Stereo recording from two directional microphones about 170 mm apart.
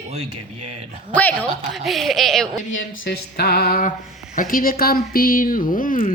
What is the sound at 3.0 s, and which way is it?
Music, 70° left (ahead or behind).